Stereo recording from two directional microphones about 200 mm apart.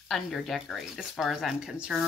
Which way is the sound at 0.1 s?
Centre (ahead or behind).